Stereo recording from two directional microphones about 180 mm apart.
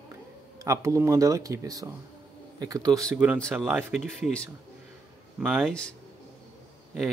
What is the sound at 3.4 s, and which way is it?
Speech, 10° right (ahead or behind).